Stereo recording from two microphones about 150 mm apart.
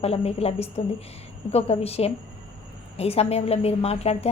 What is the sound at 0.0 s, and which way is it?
A woman's voice, 45° left (ahead or behind).